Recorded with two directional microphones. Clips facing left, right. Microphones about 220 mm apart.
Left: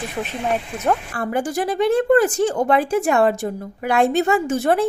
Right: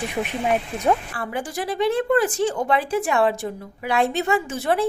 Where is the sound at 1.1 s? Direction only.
45° left (ahead or behind).